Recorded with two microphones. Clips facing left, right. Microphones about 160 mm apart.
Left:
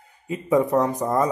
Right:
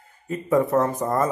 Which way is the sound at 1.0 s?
Centre (ahead or behind).